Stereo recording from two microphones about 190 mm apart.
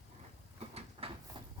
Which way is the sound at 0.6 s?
30° right (ahead or behind).